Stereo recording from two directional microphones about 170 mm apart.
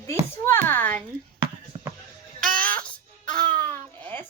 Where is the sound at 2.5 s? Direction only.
10° left (ahead or behind).